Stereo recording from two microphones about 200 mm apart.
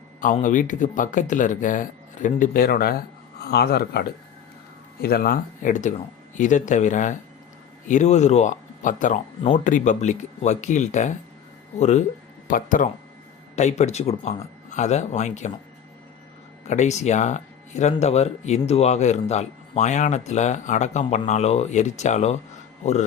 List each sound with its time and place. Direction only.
0.3 s speech: 40° left (ahead or behind)
5.0 s speech: 50° left (ahead or behind)
16.6 s speech: 35° left (ahead or behind)